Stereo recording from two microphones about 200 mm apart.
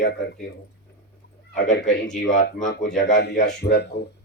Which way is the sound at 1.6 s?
Centre (ahead or behind).